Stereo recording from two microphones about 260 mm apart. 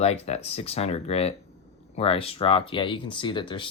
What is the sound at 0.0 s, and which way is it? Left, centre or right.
Speech, left.